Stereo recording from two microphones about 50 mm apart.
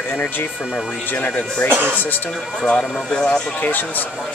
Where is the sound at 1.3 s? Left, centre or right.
Centre.